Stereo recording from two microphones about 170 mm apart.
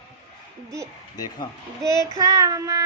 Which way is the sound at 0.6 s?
20° right (ahead or behind).